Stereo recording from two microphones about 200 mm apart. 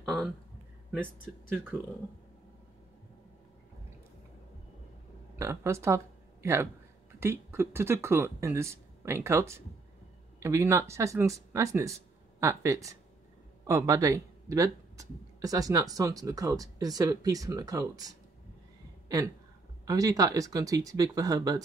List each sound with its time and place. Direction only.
1.2 s speech: 10° right (ahead or behind)
5.3 s speech: 15° right (ahead or behind)